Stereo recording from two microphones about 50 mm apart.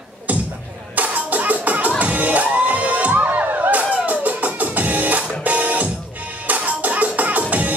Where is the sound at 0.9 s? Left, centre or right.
Right.